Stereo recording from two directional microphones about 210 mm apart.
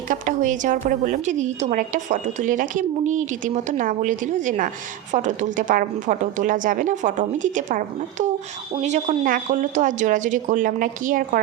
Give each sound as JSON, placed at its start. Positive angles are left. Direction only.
{"t": 0.1, "sound": "a woman's voice", "side_deg": -40}